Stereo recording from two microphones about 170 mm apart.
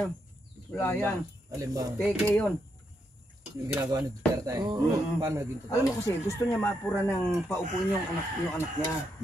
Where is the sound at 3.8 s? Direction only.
20° right (ahead or behind).